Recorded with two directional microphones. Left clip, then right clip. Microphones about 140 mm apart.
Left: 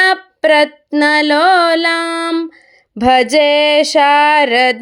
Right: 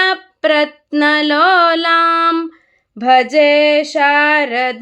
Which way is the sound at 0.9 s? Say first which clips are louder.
Left 2 dB; 20° left (ahead or behind).